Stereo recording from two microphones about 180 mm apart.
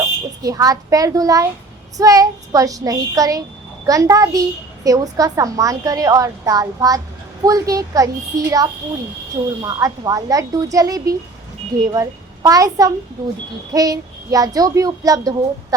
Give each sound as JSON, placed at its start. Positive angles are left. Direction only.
{"t": 0.4, "sound": "a woman's voice", "side_deg": -20}